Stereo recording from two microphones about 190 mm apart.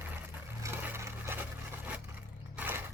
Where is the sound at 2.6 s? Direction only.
10° right (ahead or behind).